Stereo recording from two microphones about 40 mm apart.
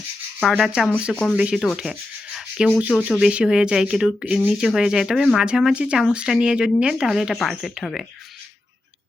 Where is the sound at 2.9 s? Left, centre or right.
Right; by 5.4 s centre.